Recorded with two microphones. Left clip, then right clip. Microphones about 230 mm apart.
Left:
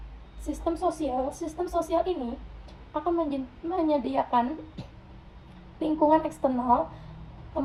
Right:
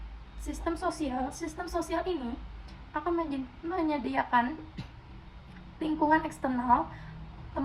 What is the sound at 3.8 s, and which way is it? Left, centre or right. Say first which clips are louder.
Speech: left 4 dB; right.